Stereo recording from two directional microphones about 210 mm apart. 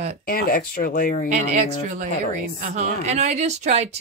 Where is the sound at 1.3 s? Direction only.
35° right (ahead or behind).